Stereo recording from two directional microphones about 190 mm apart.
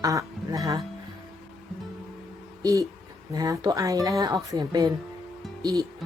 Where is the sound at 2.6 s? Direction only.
15° right (ahead or behind).